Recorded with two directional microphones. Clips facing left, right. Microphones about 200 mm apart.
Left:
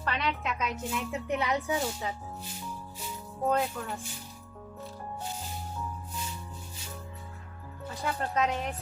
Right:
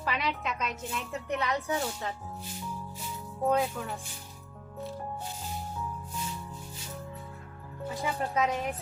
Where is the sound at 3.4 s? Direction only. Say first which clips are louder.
Right 1 dB; centre (ahead or behind).